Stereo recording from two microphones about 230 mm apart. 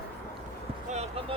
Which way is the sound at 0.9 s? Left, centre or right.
Right.